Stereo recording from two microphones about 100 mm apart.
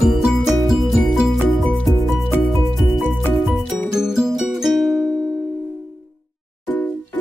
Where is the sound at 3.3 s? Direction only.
Centre (ahead or behind).